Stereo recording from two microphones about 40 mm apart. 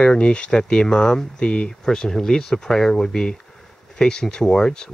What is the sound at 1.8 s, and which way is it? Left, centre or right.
Speech, centre.